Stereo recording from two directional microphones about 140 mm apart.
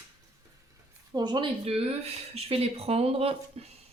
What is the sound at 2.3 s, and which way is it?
Speech, 45° right (ahead or behind).